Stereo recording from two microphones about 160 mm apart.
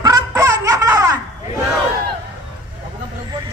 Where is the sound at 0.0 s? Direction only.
20° right (ahead or behind).